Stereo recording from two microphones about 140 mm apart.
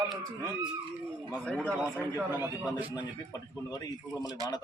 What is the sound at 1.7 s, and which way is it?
Speech, 10° right (ahead or behind).